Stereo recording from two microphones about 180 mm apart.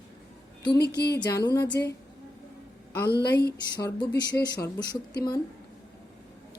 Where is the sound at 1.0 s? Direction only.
65° left (ahead or behind).